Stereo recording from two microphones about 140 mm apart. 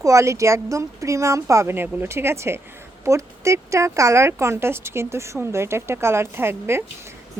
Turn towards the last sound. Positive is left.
turn(degrees=-15)  # may be behind; listen again after turning